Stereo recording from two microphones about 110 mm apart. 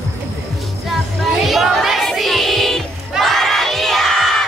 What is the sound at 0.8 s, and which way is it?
Child singing, centre (ahead or behind).